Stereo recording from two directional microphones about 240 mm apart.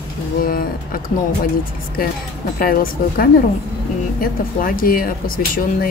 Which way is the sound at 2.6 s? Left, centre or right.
Left.